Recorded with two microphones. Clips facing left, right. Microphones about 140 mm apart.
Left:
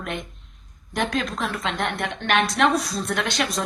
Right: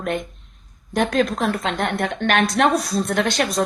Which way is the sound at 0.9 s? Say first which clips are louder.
Right 6 dB; 40° right (ahead or behind).